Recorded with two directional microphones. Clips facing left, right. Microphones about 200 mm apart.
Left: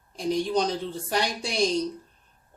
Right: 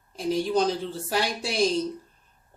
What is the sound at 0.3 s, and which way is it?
Speech, 5° right (ahead or behind).